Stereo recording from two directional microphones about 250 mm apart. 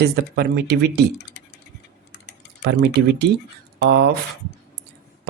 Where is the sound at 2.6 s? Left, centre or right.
Right.